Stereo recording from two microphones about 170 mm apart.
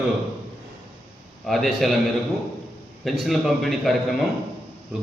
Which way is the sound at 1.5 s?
Centre (ahead or behind).